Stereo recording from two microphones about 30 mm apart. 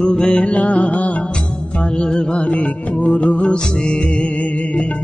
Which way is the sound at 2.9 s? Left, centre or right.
Left.